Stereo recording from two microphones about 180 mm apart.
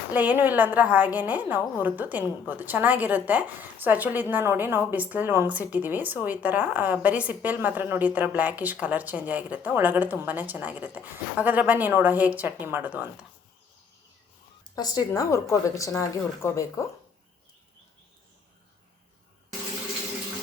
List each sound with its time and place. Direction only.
0.1 s a woman's voice: 10° right (ahead or behind)
14.8 s speech: 20° left (ahead or behind)